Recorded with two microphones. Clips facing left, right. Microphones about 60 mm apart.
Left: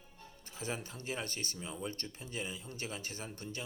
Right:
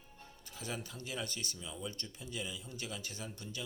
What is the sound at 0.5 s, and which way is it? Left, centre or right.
Speech, left.